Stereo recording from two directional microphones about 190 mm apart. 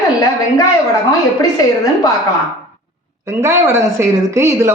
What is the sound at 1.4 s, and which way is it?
Speech, 20° left (ahead or behind).